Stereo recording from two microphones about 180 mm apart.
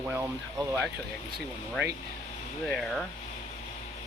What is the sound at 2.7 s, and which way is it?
Speech, centre (ahead or behind).